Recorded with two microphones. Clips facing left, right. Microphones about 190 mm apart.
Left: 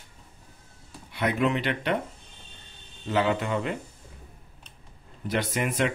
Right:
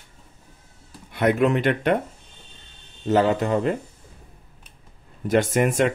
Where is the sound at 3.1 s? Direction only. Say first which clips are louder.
Right 6 dB; 40° right (ahead or behind).